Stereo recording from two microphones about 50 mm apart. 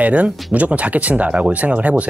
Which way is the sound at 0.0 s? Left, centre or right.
Right.